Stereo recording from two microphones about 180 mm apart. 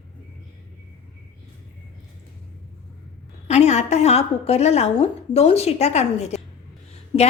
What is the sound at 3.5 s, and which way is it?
A woman's voice, 40° left (ahead or behind).